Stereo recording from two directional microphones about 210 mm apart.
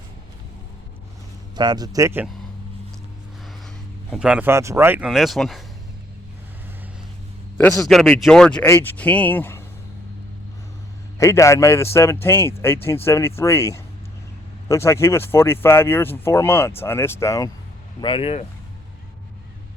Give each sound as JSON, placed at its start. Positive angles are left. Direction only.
{"t": 1.5, "sound": "speech", "side_deg": -20}
{"t": 4.1, "sound": "speech", "side_deg": -5}
{"t": 7.8, "sound": "speech", "side_deg": 0}
{"t": 11.2, "sound": "speech", "side_deg": 15}
{"t": 18.0, "sound": "speech", "side_deg": 25}